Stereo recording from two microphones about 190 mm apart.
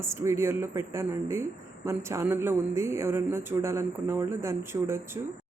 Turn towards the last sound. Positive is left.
turn(degrees=-15)  # may be behind; listen again after turning